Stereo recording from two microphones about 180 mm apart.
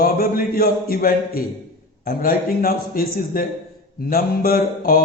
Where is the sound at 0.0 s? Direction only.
55° left (ahead or behind).